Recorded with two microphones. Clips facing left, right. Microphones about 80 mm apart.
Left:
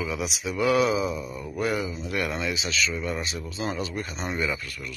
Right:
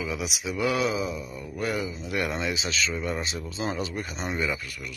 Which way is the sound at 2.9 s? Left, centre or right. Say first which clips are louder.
Even; right.